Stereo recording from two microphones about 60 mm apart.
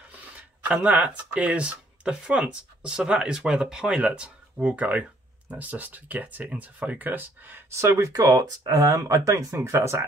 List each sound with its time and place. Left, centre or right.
0.7 s speech: right
7.7 s speech: right
8.1 s speech: right
9.6 s speech: right